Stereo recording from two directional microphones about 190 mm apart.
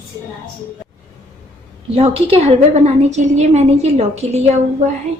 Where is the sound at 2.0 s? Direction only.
30° right (ahead or behind).